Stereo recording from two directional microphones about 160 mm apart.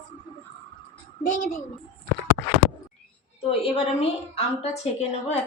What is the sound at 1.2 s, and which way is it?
Speech, 55° left (ahead or behind).